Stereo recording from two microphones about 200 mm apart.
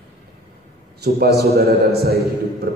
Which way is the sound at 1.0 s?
55° right (ahead or behind).